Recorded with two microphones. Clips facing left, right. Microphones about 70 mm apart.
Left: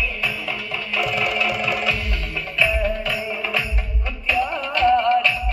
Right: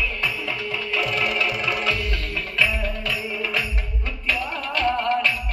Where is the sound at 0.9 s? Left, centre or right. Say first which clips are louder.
Left 2 dB; centre.